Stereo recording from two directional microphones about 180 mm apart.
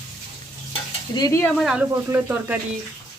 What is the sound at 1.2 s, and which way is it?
Stir, 20° left (ahead or behind).